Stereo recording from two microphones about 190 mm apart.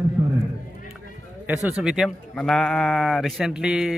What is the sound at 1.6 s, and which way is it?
Speech, 5° right (ahead or behind).